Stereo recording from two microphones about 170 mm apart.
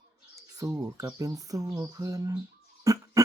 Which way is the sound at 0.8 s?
15° right (ahead or behind).